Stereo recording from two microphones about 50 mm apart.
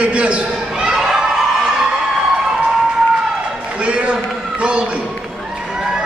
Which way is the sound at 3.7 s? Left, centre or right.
Right.